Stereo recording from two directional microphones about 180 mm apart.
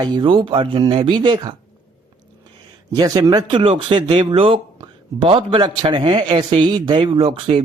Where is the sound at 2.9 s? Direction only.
20° right (ahead or behind).